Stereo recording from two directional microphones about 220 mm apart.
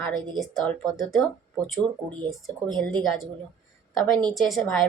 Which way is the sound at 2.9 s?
Centre (ahead or behind).